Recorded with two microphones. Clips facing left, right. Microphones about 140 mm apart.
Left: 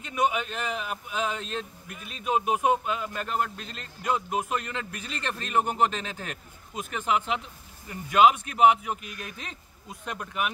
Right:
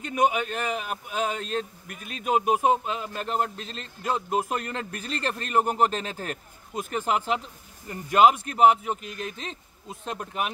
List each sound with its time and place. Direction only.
0.1 s a man's voice: 45° right (ahead or behind)